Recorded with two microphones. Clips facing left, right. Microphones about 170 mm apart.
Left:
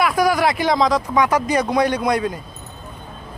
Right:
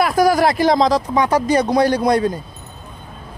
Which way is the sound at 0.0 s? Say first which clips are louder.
Right 3 dB; 40° right (ahead or behind).